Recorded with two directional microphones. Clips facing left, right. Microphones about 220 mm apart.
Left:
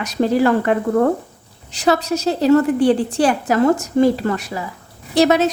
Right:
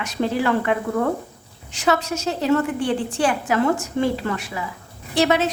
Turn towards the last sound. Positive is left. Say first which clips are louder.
# left 5 dB
turn(degrees=40)  # may be behind; listen again after turning